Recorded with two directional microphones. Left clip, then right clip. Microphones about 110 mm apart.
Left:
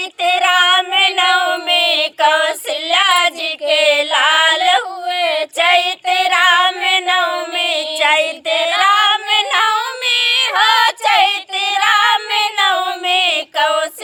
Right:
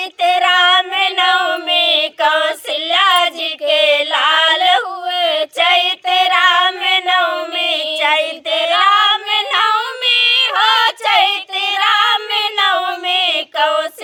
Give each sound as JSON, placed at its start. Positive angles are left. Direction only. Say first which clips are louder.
{"t": 0.2, "sound": "child singing", "louder": "right 1 dB", "side_deg": 30}
{"t": 8.8, "sound": "female singing", "louder": "even", "side_deg": 35}
{"t": 10.0, "sound": "child singing", "louder": "right 3 dB", "side_deg": 35}
{"t": 10.6, "sound": "female singing", "louder": "left 1 dB", "side_deg": 35}
{"t": 12.4, "sound": "a sound", "louder": "even", "side_deg": 30}
{"t": 13.1, "sound": "child singing", "louder": "left 2 dB", "side_deg": 35}